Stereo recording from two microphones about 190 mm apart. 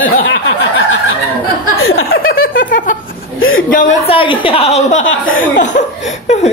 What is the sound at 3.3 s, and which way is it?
Speech, 90° left.